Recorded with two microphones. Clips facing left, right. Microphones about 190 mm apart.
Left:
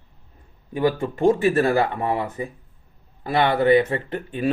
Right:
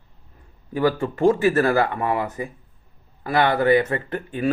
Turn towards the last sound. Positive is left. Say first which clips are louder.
# even
turn(degrees=25)  # may be behind; listen again after turning